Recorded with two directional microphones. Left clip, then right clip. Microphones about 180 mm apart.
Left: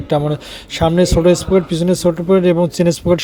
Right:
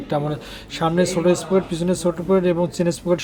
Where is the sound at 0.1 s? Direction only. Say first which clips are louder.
Left 7 dB; 35° left (ahead or behind).